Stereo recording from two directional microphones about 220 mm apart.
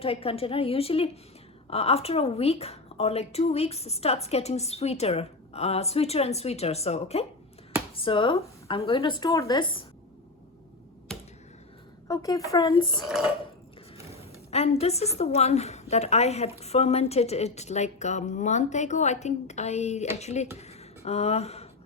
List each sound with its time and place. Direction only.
0.0 s a woman's voice: 25° left (ahead or behind)
12.0 s speech: 15° left (ahead or behind)
13.1 s speech: 5° right (ahead or behind)
14.1 s a woman's voice: 25° left (ahead or behind)